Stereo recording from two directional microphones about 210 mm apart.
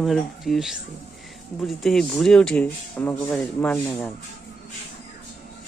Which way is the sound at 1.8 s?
Centre (ahead or behind).